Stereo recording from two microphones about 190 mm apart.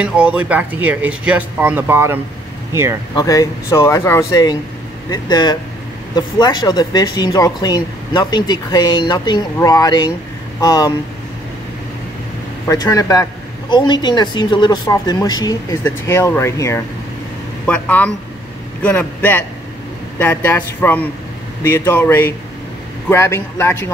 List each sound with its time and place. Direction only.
0.0 s speech: 5° right (ahead or behind)
3.2 s a woman's voice: 15° left (ahead or behind)
12.6 s a woman's voice: 15° left (ahead or behind)